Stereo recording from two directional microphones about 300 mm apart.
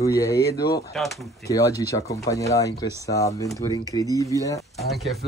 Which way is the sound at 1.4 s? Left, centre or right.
Centre.